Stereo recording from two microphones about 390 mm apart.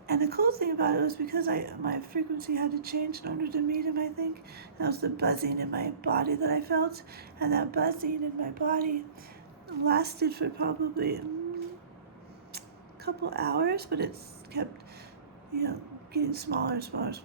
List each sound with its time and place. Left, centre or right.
0.1 s speech: right
13.1 s speech: right